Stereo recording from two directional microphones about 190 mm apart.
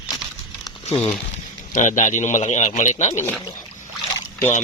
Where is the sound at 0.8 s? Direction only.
30° left (ahead or behind).